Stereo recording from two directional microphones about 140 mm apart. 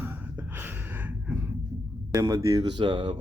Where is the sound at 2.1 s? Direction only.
25° right (ahead or behind).